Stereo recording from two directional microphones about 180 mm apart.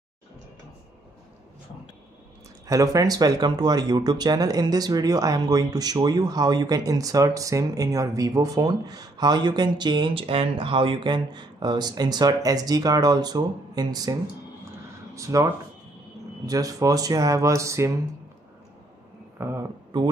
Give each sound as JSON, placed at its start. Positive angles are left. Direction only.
{"t": 2.6, "sound": "speech", "side_deg": -20}
{"t": 15.1, "sound": "speech", "side_deg": -15}
{"t": 16.4, "sound": "speech", "side_deg": -20}
{"t": 19.3, "sound": "speech", "side_deg": -15}